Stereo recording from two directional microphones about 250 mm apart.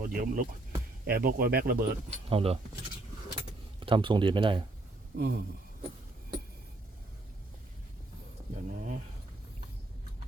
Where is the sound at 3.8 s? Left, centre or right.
Centre.